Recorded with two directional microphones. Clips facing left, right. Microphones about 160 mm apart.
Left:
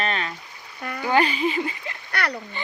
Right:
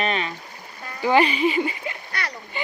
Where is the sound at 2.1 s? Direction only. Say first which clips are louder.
Left 9 dB; 65° left (ahead or behind).